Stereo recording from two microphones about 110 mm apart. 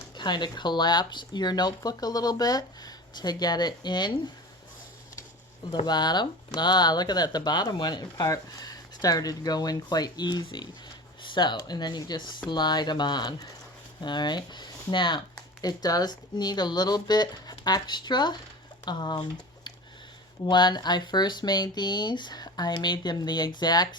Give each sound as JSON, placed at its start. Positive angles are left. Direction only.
{"t": 0.2, "sound": "speech", "side_deg": 45}
{"t": 5.7, "sound": "speech", "side_deg": 40}